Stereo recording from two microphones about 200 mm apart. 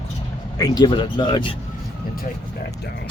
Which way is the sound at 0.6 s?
20° left (ahead or behind).